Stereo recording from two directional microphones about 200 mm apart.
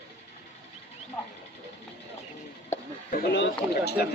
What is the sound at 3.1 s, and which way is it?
Bird, 45° left (ahead or behind).